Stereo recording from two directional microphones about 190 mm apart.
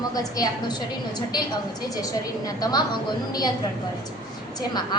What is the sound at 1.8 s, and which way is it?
A woman's voice, 20° left (ahead or behind).